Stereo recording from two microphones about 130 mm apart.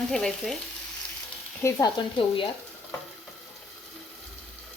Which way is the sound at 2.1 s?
40° left (ahead or behind).